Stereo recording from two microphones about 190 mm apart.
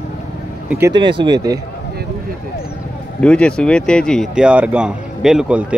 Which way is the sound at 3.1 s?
5° left (ahead or behind).